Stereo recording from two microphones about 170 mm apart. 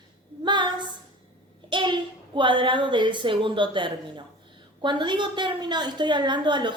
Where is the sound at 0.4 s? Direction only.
25° right (ahead or behind).